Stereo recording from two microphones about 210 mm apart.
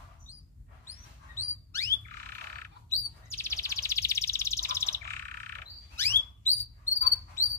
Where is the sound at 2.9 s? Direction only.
10° left (ahead or behind).